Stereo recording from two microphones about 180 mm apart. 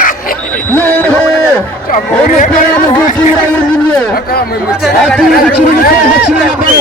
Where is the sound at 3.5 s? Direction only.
10° left (ahead or behind).